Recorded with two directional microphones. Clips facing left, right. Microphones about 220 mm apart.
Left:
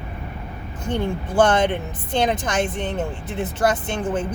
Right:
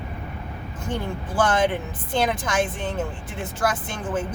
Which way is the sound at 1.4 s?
20° left (ahead or behind).